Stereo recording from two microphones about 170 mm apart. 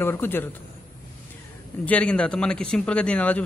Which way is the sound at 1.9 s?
5° left (ahead or behind).